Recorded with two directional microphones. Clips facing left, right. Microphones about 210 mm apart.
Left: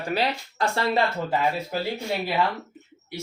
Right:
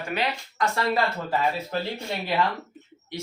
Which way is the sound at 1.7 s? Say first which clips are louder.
Even; 10° left (ahead or behind).